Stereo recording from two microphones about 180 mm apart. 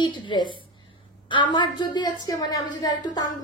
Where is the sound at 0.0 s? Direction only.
25° left (ahead or behind).